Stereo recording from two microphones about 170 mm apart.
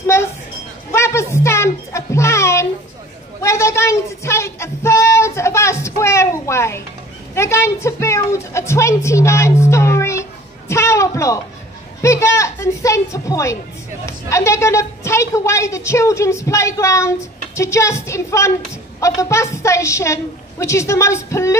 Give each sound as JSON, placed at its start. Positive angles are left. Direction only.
{"t": 0.0, "sound": "a sound", "side_deg": 15}
{"t": 0.9, "sound": "music", "side_deg": 15}
{"t": 3.3, "sound": "child singing", "side_deg": 15}
{"t": 7.3, "sound": "a woman's voice", "side_deg": 15}